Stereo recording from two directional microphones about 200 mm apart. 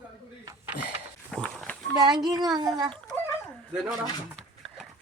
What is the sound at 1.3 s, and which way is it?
Walk, 5° left (ahead or behind).